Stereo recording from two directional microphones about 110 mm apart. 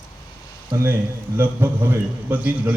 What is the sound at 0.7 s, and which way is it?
A man's voice, 25° right (ahead or behind).